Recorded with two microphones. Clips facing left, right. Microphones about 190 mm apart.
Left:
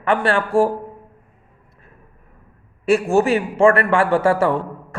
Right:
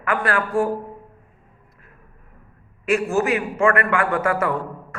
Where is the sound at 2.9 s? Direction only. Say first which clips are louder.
Left 4 dB; 30° left (ahead or behind).